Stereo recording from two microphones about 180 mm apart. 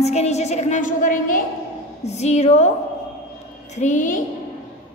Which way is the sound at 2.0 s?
40° left (ahead or behind).